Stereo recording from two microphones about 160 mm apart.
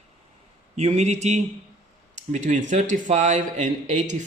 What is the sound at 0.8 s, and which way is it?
Speech, 45° right (ahead or behind).